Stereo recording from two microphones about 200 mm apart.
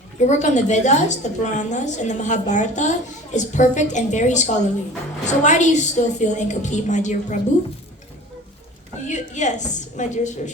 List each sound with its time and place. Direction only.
0.2 s a woman's voice: 35° left (ahead or behind)
9.0 s a woman's voice: 35° left (ahead or behind)